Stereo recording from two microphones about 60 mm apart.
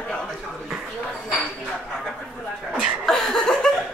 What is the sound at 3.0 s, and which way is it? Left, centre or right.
Laughter, centre.